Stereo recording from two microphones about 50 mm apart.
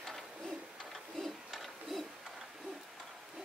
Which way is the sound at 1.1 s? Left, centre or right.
Centre.